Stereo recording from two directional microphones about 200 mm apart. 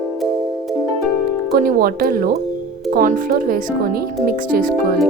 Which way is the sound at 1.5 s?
50° right (ahead or behind).